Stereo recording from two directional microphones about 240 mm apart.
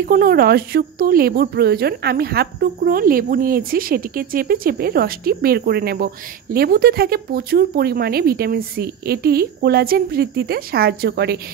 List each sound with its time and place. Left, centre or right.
0.1 s speech: right